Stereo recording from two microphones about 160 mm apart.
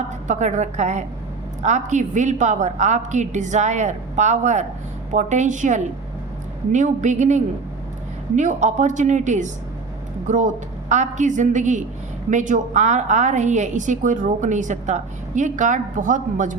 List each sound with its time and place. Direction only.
0.3 s a woman's voice: 45° right (ahead or behind)